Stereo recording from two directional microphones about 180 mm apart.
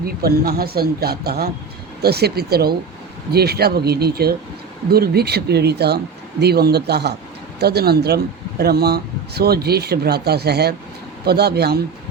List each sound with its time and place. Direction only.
0.0 s speech: 60° right (ahead or behind)